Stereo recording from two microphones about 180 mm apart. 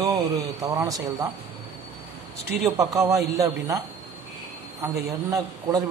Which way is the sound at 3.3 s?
20° right (ahead or behind).